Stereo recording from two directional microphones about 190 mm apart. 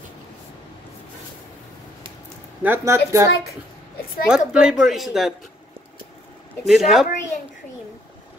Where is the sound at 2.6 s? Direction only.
10° right (ahead or behind).